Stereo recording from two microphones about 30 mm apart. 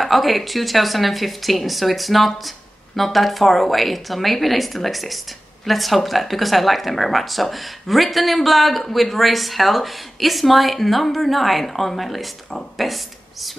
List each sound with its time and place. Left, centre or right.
0.0 s a man's voice: centre